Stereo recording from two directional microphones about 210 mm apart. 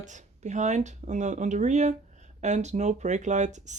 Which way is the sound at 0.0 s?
35° right (ahead or behind).